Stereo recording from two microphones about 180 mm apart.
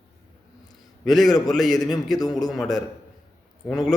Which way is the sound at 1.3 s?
20° left (ahead or behind).